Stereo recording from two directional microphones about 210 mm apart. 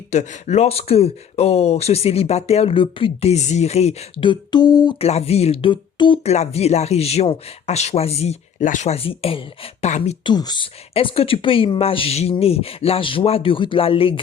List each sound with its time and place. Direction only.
0.1 s speech: 35° left (ahead or behind)
10.3 s speech: 20° left (ahead or behind)